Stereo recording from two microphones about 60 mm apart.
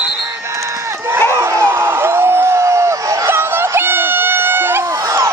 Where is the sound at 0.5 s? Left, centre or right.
Right.